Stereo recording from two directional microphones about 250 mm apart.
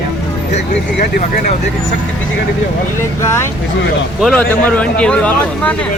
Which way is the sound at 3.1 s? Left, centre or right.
Centre.